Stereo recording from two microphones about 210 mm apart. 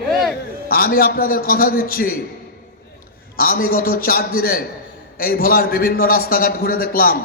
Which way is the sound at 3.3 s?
45° left (ahead or behind).